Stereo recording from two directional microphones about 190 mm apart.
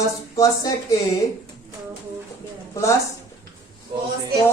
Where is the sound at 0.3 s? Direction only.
15° left (ahead or behind).